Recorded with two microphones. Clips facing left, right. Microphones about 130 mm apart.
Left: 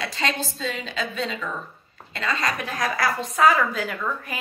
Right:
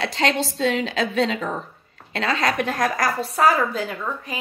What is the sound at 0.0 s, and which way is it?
A woman's voice, 75° right (ahead or behind).